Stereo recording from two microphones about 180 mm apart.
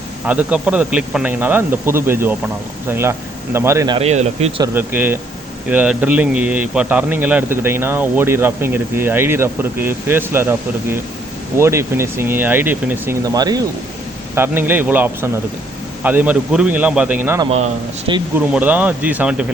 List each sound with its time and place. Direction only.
0.3 s speech: 5° right (ahead or behind)
3.9 s speech: 35° right (ahead or behind)
4.6 s speech: 10° right (ahead or behind)
13.2 s speech: 20° right (ahead or behind)
17.4 s speech: 35° right (ahead or behind)
18.3 s speech: 10° right (ahead or behind)